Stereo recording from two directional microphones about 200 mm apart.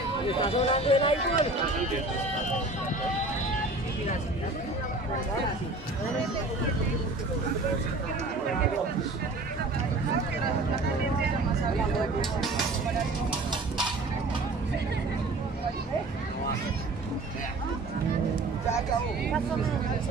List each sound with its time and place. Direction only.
0.4 s speech: 25° left (ahead or behind)